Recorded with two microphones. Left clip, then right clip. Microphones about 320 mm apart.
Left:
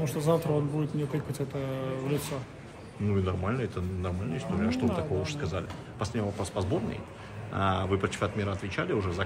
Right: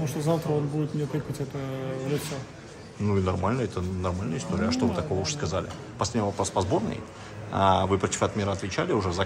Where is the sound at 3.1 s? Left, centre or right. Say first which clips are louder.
Right 5 dB; centre.